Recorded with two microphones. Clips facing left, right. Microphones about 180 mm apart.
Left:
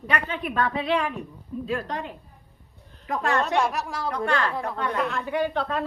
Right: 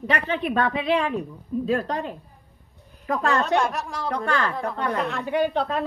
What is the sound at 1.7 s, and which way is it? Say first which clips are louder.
Speech: right 4 dB; 35° right (ahead or behind).